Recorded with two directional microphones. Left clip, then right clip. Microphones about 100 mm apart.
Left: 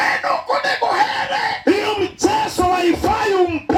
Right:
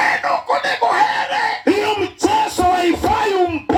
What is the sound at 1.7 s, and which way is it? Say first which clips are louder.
Yell: left 1 dB; 20° right (ahead or behind).